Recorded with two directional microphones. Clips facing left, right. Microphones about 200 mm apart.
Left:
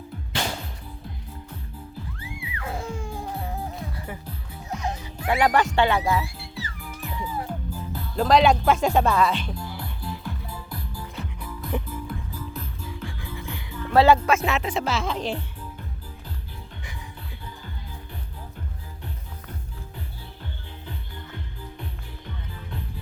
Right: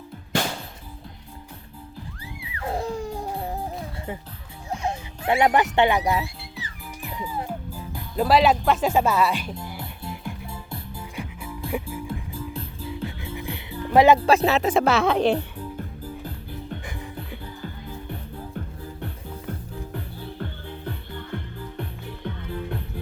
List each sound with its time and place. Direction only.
2.6 s music: 35° right (ahead or behind)
4.7 s music: 30° right (ahead or behind); by 9.6 s 10° right (ahead or behind)
9.6 s music: 25° right (ahead or behind)
11.2 s music: 5° right (ahead or behind)
12.0 s music: 30° right (ahead or behind)
13.9 s speech: 15° right (ahead or behind)
14.2 s music: 35° right (ahead or behind)
14.7 s a woman's voice: 55° right (ahead or behind)